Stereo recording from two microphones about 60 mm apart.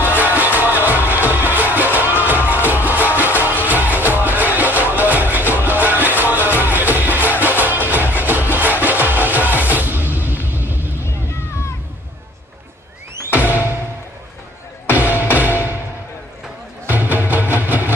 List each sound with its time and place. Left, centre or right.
0.1 s music: right
11.1 s boat: left
13.3 s music: right
15.0 s music: right
16.8 s music: right